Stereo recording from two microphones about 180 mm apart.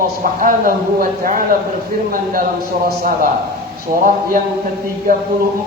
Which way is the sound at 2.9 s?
50° right (ahead or behind).